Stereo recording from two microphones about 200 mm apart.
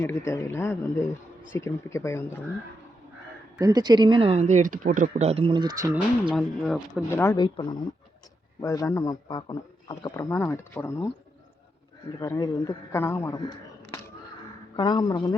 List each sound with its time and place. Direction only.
0.0 s speech: 10° left (ahead or behind)
3.6 s speech: 20° right (ahead or behind)
6.3 s speech: centre (ahead or behind)
7.1 s speech: 10° left (ahead or behind)
7.3 s speech: 25° left (ahead or behind)
12.2 s speech: 15° left (ahead or behind)
14.8 s speech: 20° left (ahead or behind)